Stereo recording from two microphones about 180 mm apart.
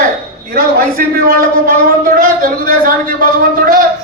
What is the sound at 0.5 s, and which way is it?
A man's voice, 55° right (ahead or behind).